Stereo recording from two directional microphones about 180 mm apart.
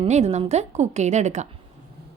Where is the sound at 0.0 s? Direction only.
35° right (ahead or behind).